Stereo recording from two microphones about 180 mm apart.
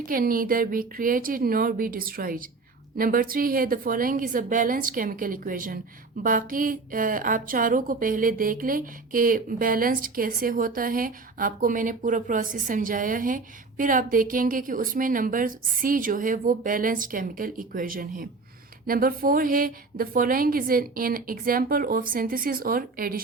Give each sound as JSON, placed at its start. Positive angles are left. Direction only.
{"t": 0.0, "sound": "a woman's voice", "side_deg": -50}